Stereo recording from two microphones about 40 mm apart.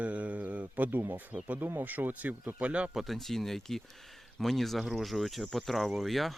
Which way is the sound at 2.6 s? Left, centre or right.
Right.